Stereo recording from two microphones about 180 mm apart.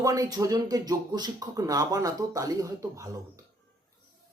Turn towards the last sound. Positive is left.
turn(degrees=-15)  # may be behind; listen again after turning